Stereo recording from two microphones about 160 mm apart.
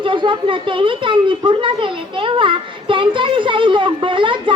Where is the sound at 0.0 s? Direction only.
30° right (ahead or behind).